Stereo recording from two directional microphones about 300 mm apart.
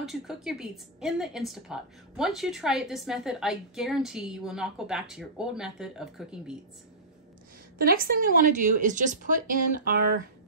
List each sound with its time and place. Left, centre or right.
0.0 s a woman's voice: centre
7.8 s a woman's voice: right